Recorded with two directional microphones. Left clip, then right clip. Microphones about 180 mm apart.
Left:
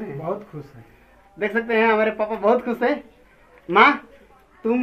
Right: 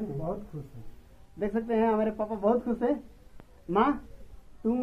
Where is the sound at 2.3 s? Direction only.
10° left (ahead or behind).